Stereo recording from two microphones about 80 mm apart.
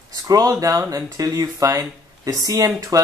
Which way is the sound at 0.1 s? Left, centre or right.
Right.